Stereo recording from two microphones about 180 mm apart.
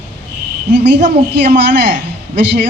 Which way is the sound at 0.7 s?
70° right (ahead or behind).